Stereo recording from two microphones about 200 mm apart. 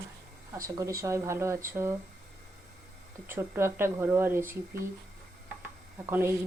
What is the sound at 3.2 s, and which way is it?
Speech, 10° right (ahead or behind).